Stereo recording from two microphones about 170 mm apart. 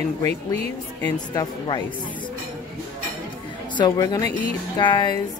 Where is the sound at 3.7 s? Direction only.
25° left (ahead or behind).